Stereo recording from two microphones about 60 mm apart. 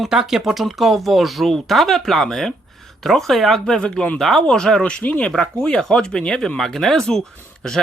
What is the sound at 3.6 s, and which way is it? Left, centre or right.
Speech, centre.